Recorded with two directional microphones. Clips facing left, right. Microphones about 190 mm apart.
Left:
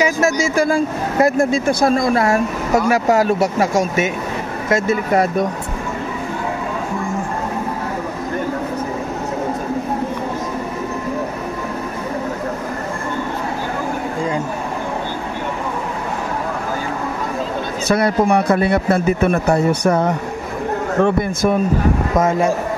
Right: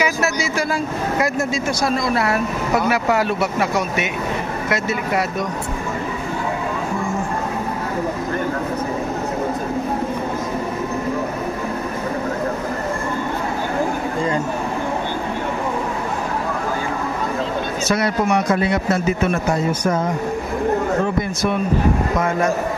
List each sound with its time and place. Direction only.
0.0 s speech: 45° left (ahead or behind)
17.8 s speech: 55° left (ahead or behind)
21.0 s speech: 50° left (ahead or behind)